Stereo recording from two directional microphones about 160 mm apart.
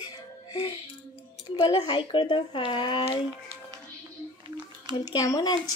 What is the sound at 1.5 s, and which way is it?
A child's voice, 30° left (ahead or behind).